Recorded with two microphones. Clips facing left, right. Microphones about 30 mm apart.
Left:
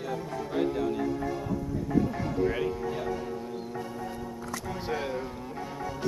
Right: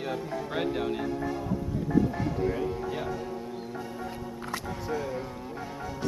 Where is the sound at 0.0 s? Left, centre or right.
Right.